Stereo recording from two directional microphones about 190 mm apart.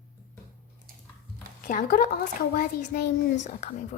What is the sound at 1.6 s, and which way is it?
A child's voice, 45° left (ahead or behind).